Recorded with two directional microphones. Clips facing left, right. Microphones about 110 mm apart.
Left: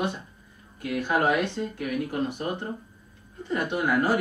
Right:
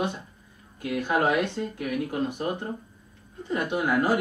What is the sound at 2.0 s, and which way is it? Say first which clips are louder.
Speech: even; 20° right (ahead or behind).